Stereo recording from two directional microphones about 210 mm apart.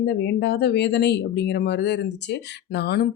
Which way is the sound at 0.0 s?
55° left (ahead or behind).